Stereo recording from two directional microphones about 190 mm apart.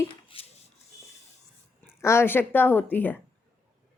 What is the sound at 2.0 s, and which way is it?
A woman's voice, 15° left (ahead or behind).